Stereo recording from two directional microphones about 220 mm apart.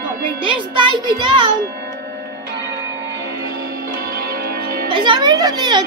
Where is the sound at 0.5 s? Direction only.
20° right (ahead or behind).